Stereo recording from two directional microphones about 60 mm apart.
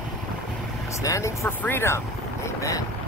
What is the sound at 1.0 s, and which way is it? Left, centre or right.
Speech, left.